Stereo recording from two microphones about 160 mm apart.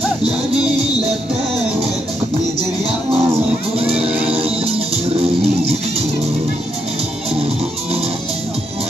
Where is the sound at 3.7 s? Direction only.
35° right (ahead or behind).